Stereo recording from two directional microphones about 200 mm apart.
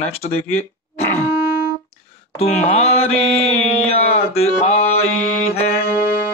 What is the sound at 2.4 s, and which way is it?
Speech, 30° left (ahead or behind).